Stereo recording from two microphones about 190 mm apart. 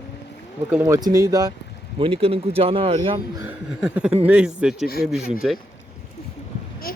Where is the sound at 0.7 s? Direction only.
15° right (ahead or behind).